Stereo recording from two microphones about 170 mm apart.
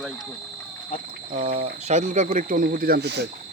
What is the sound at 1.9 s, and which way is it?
Speech, 50° right (ahead or behind).